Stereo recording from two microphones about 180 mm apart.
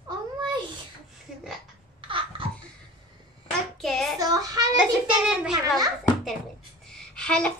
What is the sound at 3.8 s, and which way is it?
Speech, centre (ahead or behind).